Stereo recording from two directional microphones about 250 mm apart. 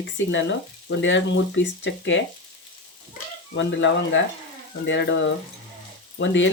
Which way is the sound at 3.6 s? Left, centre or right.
Left.